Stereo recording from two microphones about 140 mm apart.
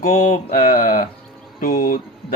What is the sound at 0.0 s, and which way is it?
Mantra, 80° left.